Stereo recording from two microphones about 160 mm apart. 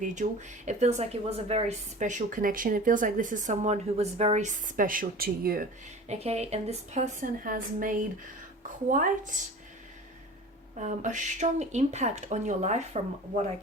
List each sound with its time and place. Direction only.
0.0 s a woman's voice: 50° right (ahead or behind); by 5.6 s 70° right (ahead or behind)
6.1 s a woman's voice: 40° right (ahead or behind)
10.8 s a woman's voice: 50° right (ahead or behind)